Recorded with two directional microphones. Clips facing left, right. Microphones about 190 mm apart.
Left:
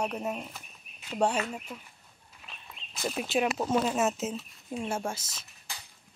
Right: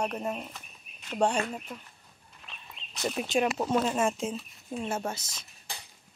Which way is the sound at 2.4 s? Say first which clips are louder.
Even; 5° left (ahead or behind).